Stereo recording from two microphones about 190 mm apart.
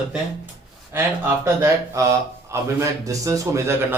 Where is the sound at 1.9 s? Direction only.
15° right (ahead or behind).